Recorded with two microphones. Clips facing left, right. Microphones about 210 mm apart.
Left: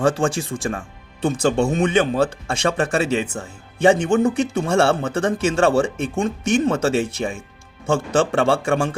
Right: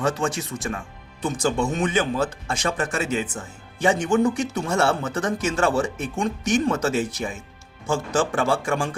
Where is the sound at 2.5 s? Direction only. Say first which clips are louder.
Left 5 dB; 30° left (ahead or behind).